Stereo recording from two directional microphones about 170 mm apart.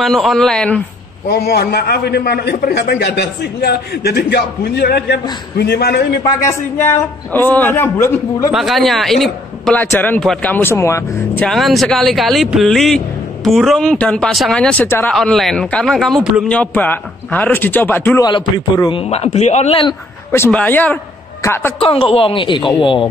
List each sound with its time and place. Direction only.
0.0 s speech: centre (ahead or behind)
1.3 s a man's voice: 70° left (ahead or behind)
7.3 s a man's voice: 10° left (ahead or behind)
8.5 s a man's voice: centre (ahead or behind); by 11.4 s 15° left (ahead or behind)
11.4 s a man's voice: centre (ahead or behind)
18.2 s a man's voice: 25° left (ahead or behind)
20.2 s a man's voice: 15° left (ahead or behind)
21.8 s a man's voice: 35° left (ahead or behind)